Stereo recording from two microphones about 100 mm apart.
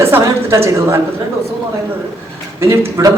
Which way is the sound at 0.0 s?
30° right (ahead or behind).